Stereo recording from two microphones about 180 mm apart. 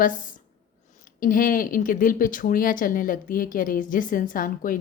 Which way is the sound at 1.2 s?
50° left (ahead or behind).